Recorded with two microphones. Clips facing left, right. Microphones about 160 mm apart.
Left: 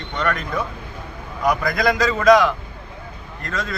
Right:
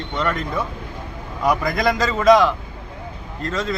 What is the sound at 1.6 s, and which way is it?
Speech, 25° right (ahead or behind).